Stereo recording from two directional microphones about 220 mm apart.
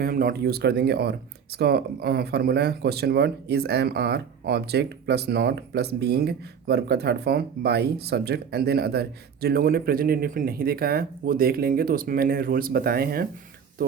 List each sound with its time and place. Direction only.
0.0 s speech: 40° right (ahead or behind)